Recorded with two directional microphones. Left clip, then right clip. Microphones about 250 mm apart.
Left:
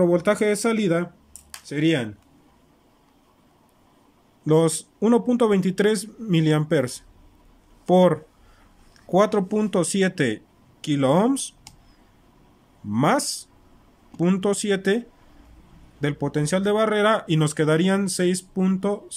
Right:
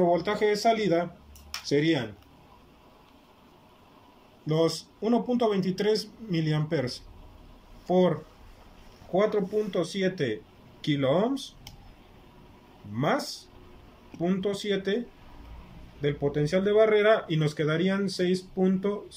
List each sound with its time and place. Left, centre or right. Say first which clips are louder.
0.1 s speech: left 5 dB; left
4.5 s speech: left 6 dB; left
9.1 s speech: left 5 dB; left
12.9 s speech: left 7 dB; left
16.0 s speech: left 2 dB; left